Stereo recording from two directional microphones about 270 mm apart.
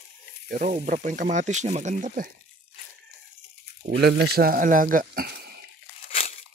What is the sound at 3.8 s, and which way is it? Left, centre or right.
Speech, right.